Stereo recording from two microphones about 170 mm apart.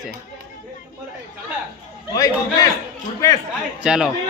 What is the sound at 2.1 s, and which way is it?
Speech, 20° left (ahead or behind).